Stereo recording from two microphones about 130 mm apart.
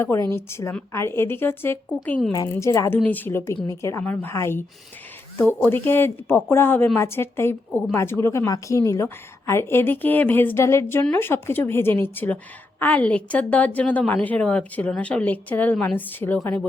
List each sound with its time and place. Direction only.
0.0 s a woman's voice: 20° left (ahead or behind)
2.5 s a woman's voice: 25° left (ahead or behind)
3.0 s a woman's voice: 15° left (ahead or behind)